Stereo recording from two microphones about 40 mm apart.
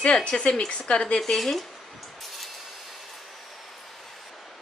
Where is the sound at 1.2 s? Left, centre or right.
Centre.